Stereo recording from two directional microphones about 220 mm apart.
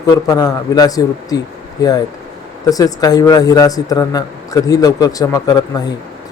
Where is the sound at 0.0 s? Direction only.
15° left (ahead or behind).